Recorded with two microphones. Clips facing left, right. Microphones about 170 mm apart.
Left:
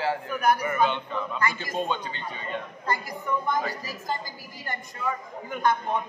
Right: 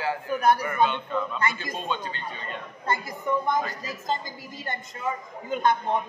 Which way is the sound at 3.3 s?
20° right (ahead or behind).